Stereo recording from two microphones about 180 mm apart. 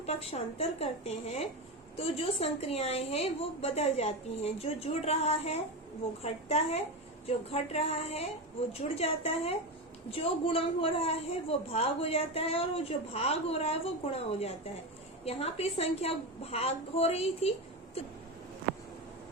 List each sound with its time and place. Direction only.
0.0 s a woman's voice: 35° left (ahead or behind)